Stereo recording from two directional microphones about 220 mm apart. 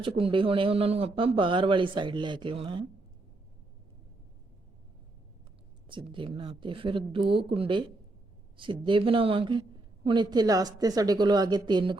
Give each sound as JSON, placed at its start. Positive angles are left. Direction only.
{"t": 0.2, "sound": "speech", "side_deg": -25}
{"t": 5.9, "sound": "speech", "side_deg": -25}